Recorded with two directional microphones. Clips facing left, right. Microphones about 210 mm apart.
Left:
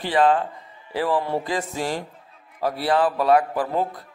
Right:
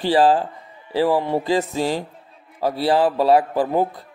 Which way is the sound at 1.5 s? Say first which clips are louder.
Right 6 dB; 30° right (ahead or behind).